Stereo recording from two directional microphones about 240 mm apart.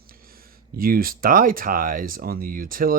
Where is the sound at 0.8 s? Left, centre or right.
Right.